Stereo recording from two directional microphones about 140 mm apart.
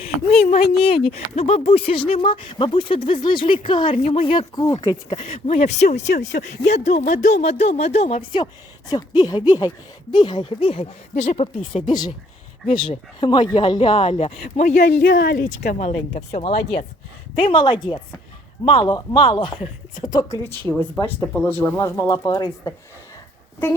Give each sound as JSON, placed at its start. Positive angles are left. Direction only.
{"t": 0.3, "sound": "speech", "side_deg": 45}
{"t": 3.9, "sound": "speech", "side_deg": 50}
{"t": 4.7, "sound": "speech", "side_deg": 30}
{"t": 5.1, "sound": "speech", "side_deg": 40}
{"t": 5.5, "sound": "speech", "side_deg": 55}
{"t": 7.1, "sound": "speech", "side_deg": 60}
{"t": 11.7, "sound": "speech", "side_deg": 35}
{"t": 15.8, "sound": "speech", "side_deg": 55}
{"t": 17.3, "sound": "speech", "side_deg": 40}
{"t": 20.7, "sound": "speech", "side_deg": 15}
{"t": 21.8, "sound": "speech", "side_deg": 25}